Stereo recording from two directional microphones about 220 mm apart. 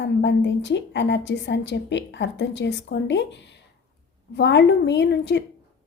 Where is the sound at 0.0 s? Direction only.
55° left (ahead or behind).